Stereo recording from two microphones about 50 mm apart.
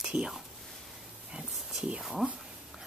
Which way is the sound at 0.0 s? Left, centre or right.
Centre.